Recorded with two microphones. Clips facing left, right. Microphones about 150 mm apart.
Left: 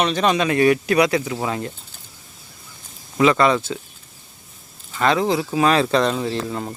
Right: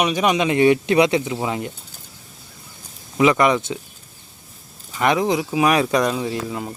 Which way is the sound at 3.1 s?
20° right (ahead or behind).